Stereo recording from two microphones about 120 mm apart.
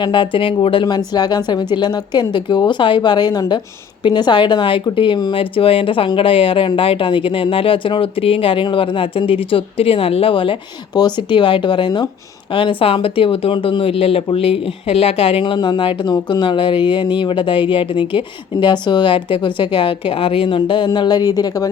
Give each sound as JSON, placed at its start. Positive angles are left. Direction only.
{"t": 0.0, "sound": "speech", "side_deg": 45}
{"t": 15.5, "sound": "speech", "side_deg": 40}